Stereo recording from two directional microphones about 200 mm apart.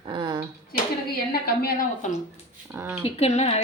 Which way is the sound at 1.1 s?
50° left (ahead or behind).